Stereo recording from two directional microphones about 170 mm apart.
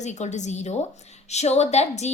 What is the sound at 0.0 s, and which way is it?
A woman's voice, 45° left (ahead or behind).